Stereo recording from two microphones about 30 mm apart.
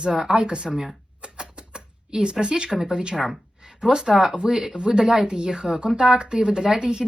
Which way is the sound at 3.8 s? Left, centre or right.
Centre.